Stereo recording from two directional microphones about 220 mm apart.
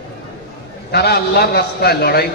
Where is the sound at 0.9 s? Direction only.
45° left (ahead or behind).